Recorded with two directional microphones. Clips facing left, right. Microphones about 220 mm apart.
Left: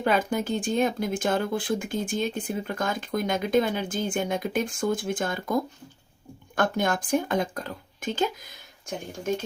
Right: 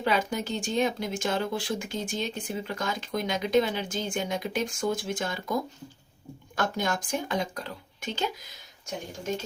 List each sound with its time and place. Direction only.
0.0 s speech: 50° left (ahead or behind)
6.6 s speech: 55° left (ahead or behind)